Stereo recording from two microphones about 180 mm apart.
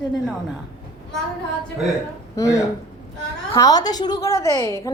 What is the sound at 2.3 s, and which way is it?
A woman's voice, 15° left (ahead or behind).